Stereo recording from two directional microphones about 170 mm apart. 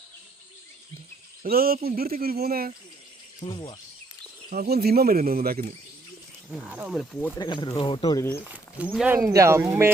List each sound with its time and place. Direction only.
1.5 s speech: 60° right (ahead or behind)
3.4 s speech: 25° left (ahead or behind)
4.4 s speech: 65° right (ahead or behind)
6.5 s speech: 5° right (ahead or behind)
7.3 s speech: 25° left (ahead or behind)
8.2 s speech: 15° left (ahead or behind)
8.4 s a sound: 10° right (ahead or behind)
8.9 s speech: 5° right (ahead or behind)
9.3 s speech: 15° right (ahead or behind)